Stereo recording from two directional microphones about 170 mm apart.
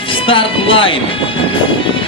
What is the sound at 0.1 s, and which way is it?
Music, 30° left (ahead or behind).